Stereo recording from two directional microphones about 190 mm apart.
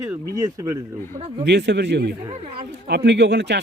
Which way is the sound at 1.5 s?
65° right (ahead or behind).